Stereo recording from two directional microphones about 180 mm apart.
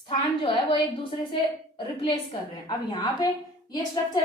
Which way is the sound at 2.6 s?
25° left (ahead or behind).